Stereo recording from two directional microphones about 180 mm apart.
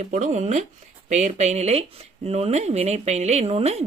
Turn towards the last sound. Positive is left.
turn(degrees=-35)  # may be behind; listen again after turning